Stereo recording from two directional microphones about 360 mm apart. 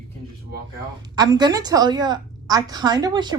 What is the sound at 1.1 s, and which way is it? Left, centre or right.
A woman's voice, centre.